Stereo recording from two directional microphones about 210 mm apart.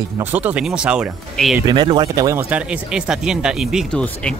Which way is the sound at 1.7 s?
20° right (ahead or behind).